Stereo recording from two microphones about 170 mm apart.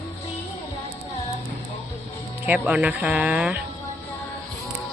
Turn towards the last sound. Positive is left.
turn(degrees=-10)  # may be behind; listen again after turning